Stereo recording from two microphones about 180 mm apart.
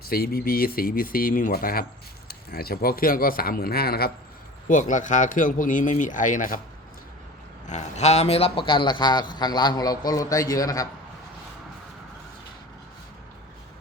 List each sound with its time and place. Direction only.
0.1 s speech: 55° left (ahead or behind)
4.7 s speech: 45° left (ahead or behind)
7.7 s a man's voice: 35° left (ahead or behind); by 10.8 s 20° left (ahead or behind)